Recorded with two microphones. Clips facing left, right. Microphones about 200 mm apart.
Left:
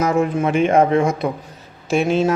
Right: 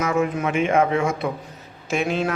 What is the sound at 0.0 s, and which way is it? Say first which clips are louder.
A man's voice: left 4 dB; 35° left (ahead or behind).